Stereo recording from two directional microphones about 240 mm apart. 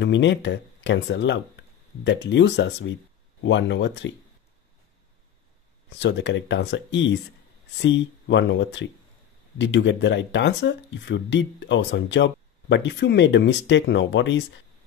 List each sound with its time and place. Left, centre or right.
0.0 s speech: left
5.9 s speech: left